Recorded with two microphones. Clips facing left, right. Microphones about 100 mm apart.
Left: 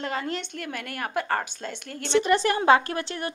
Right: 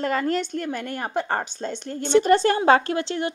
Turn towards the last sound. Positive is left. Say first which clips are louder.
# right 5 dB
turn(degrees=-25)  # may be behind; listen again after turning